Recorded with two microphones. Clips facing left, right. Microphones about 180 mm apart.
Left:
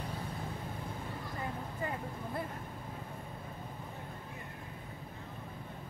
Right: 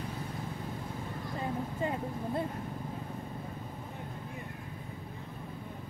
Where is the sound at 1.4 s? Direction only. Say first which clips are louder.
Right 6 dB; 25° right (ahead or behind).